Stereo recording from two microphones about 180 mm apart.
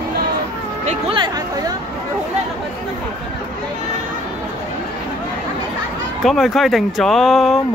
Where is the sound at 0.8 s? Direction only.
30° right (ahead or behind).